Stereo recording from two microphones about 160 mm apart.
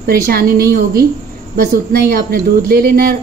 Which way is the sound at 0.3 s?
70° right (ahead or behind).